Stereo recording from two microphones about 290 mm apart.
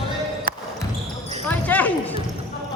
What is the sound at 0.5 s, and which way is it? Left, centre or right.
Basketball bounce, right.